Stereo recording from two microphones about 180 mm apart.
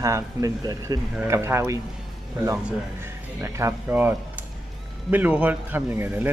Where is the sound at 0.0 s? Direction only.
20° right (ahead or behind).